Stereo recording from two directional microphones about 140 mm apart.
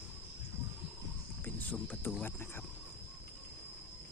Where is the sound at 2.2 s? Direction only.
15° left (ahead or behind).